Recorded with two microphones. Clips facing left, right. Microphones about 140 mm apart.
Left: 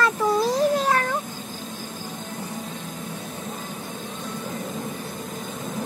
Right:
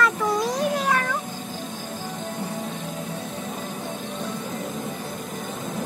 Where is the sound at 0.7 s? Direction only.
30° left (ahead or behind).